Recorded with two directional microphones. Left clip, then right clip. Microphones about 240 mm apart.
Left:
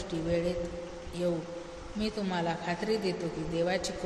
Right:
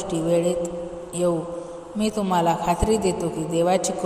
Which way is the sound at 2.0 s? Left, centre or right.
Right.